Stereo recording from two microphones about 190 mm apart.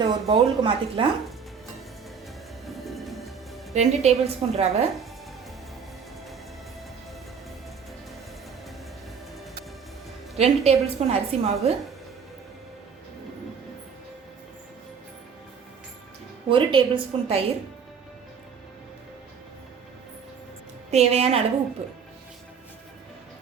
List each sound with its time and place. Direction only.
0.0 s speech: 25° right (ahead or behind)
2.6 s music: centre (ahead or behind)
3.8 s a woman's voice: 35° right (ahead or behind)
10.3 s a woman's voice: 35° right (ahead or behind)
16.5 s speech: 25° right (ahead or behind)
20.9 s a woman's voice: 35° right (ahead or behind)